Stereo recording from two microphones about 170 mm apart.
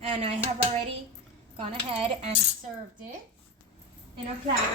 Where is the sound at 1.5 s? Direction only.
35° right (ahead or behind).